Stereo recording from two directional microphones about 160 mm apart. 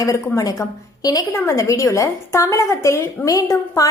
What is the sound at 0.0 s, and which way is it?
A woman's voice, 20° left (ahead or behind).